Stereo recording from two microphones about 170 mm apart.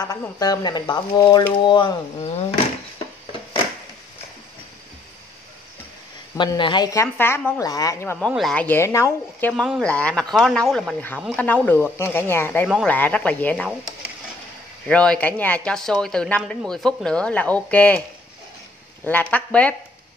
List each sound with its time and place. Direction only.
0.2 s a woman's voice: 20° left (ahead or behind)
6.3 s a woman's voice: 25° left (ahead or behind)
8.3 s speech: centre (ahead or behind)
9.5 s speech: centre (ahead or behind)
11.4 s speech: 10° left (ahead or behind)
14.9 s speech: 5° left (ahead or behind)
19.0 s speech: 10° left (ahead or behind)